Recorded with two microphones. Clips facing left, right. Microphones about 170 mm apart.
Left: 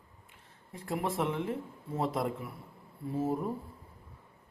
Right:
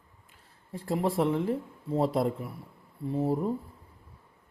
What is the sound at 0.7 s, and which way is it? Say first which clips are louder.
Speech: right 5 dB; 30° right (ahead or behind).